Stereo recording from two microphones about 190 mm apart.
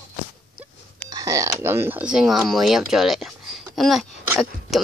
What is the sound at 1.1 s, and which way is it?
Speech, 15° right (ahead or behind).